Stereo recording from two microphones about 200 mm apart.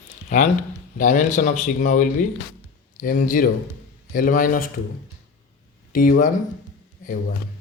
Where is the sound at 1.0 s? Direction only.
40° left (ahead or behind).